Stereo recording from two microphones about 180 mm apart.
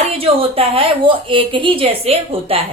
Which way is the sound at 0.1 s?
30° right (ahead or behind).